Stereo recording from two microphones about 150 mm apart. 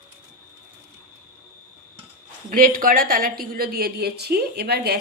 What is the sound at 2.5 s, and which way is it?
A woman's voice, 70° right (ahead or behind).